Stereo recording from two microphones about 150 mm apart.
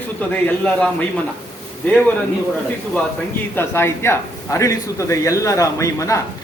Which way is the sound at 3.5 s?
15° left (ahead or behind).